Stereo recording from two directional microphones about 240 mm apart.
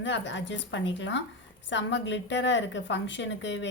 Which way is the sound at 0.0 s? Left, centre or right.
Left.